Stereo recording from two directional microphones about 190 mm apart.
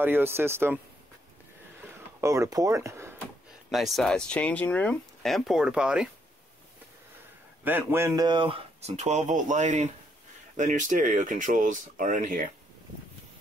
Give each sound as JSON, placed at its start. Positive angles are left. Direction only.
{"t": 0.0, "sound": "speech", "side_deg": -10}
{"t": 2.0, "sound": "a sound", "side_deg": -15}
{"t": 3.7, "sound": "speech", "side_deg": 0}
{"t": 7.6, "sound": "speech", "side_deg": -10}
{"t": 8.3, "sound": "speech", "side_deg": -25}